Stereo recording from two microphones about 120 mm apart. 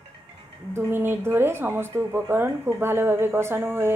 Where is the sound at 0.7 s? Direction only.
20° right (ahead or behind).